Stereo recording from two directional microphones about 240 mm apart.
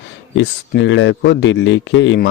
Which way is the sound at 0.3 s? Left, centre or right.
Left.